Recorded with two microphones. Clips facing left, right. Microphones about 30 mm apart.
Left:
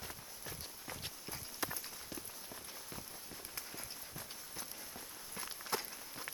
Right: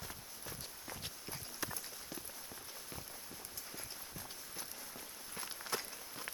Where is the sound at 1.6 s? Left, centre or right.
Centre.